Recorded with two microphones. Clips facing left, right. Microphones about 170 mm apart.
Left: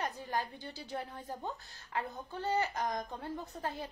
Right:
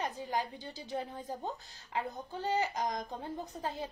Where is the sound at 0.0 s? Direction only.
15° right (ahead or behind).